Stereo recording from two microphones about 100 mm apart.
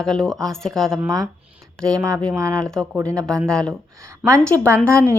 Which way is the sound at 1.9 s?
35° right (ahead or behind).